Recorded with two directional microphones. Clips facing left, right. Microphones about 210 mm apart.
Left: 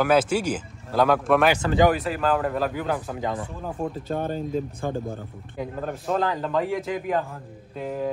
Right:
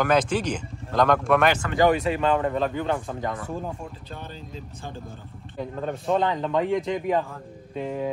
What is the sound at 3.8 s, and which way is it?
Speech, 50° left (ahead or behind).